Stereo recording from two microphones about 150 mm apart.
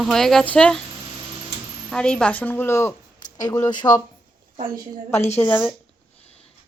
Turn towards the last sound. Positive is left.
turn(degrees=10)  # may be behind; listen again after turning